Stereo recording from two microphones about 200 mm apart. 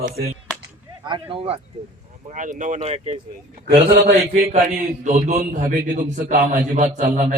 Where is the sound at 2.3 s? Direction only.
40° right (ahead or behind).